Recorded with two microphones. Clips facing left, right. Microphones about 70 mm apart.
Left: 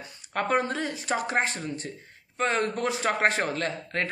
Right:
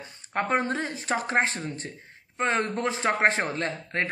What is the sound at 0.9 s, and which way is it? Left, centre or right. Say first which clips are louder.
Speech: right 2 dB; right.